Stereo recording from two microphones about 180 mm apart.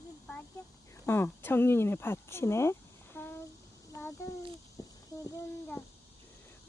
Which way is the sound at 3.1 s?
15° left (ahead or behind).